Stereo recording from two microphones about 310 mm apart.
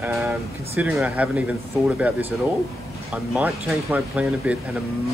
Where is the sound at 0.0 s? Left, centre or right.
Centre.